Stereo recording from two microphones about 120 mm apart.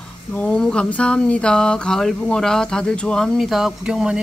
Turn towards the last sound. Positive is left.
turn(degrees=-5)  # may be behind; listen again after turning